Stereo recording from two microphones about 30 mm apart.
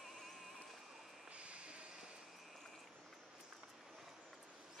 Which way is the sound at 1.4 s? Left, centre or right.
Right.